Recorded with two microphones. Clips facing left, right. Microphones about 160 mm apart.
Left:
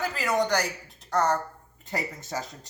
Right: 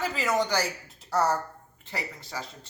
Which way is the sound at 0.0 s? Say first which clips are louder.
Left 1 dB; centre (ahead or behind).